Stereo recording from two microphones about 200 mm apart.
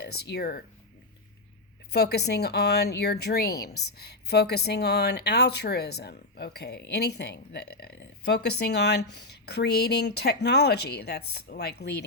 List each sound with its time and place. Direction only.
0.0 s speech: 55° left (ahead or behind)
1.9 s speech: 55° left (ahead or behind)